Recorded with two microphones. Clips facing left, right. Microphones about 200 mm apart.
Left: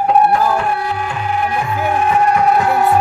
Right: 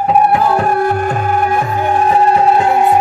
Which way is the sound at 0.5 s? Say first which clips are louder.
Right 5 dB; 45° right (ahead or behind).